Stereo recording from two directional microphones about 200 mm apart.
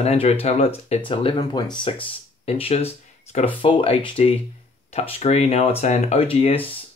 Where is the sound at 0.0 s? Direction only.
30° left (ahead or behind).